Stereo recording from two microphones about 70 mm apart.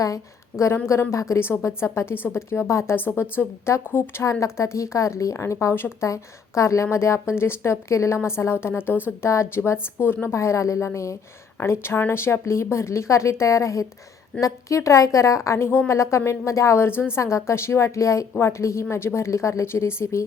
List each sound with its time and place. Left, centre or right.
0.6 s a woman's voice: left
5.7 s a woman's voice: left
6.1 s a woman's voice: left
10.3 s a woman's voice: left
11.5 s a woman's voice: left